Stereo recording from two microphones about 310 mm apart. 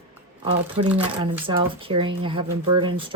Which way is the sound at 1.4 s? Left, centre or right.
Centre.